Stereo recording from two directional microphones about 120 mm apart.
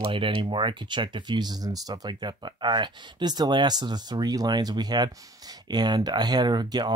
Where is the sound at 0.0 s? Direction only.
45° right (ahead or behind).